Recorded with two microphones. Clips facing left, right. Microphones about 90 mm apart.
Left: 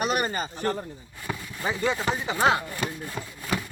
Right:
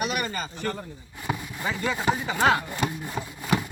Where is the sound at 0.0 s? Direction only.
40° left (ahead or behind).